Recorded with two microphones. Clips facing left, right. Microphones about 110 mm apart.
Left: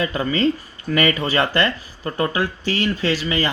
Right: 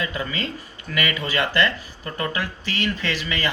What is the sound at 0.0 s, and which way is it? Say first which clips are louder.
Speech: left 8 dB; 40° left (ahead or behind).